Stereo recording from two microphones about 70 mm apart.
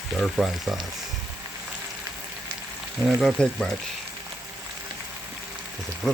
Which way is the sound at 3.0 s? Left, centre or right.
Centre.